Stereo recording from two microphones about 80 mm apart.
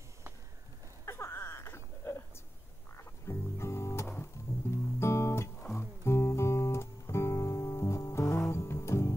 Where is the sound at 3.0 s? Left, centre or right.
Left.